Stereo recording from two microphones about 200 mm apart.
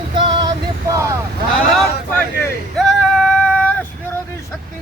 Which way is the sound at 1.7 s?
5° left (ahead or behind).